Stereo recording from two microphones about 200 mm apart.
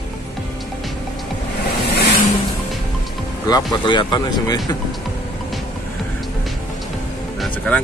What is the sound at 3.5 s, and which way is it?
Speech, 25° left (ahead or behind).